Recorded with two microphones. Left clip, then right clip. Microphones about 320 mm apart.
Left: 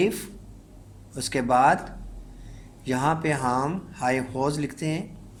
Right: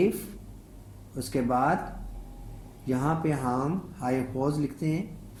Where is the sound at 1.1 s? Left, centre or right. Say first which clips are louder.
Left 6 dB; left.